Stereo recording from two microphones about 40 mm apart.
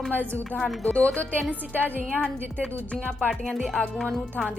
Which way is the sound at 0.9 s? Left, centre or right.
Left.